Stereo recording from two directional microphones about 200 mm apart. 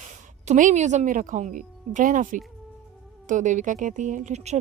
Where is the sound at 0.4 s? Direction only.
35° right (ahead or behind).